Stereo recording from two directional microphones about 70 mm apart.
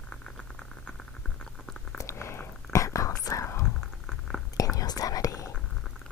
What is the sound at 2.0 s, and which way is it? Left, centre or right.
Whispering, left.